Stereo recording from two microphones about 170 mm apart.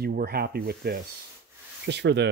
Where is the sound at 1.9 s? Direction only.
90° right.